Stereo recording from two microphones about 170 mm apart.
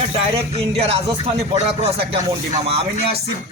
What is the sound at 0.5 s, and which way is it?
Speech, 35° right (ahead or behind).